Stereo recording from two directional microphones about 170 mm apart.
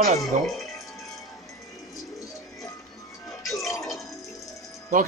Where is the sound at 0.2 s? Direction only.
Centre (ahead or behind).